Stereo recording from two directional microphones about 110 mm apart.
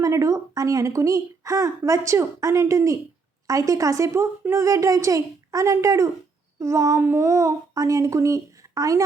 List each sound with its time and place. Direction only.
0.0 s speech: 30° right (ahead or behind)